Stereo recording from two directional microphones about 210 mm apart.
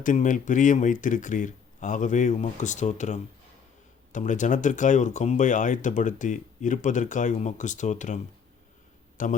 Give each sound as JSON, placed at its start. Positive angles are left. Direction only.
{"t": 0.0, "sound": "speech", "side_deg": 40}